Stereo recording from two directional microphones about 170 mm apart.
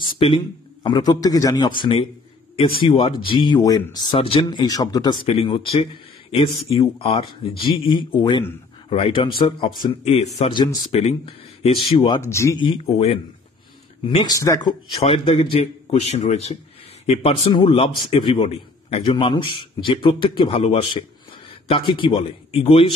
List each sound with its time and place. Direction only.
0.2 s a man's voice: 35° left (ahead or behind)
1.8 s a man's voice: 30° left (ahead or behind)
5.2 s a man's voice: 35° left (ahead or behind)
7.0 s a man's voice: 35° left (ahead or behind)
12.3 s speech: 15° left (ahead or behind)
12.5 s a man's voice: 30° left (ahead or behind)
14.1 s a man's voice: 20° left (ahead or behind)